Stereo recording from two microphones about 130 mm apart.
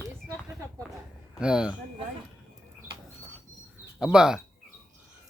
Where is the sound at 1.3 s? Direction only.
5° right (ahead or behind).